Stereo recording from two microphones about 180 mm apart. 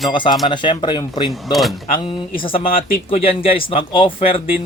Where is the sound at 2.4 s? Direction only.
30° left (ahead or behind).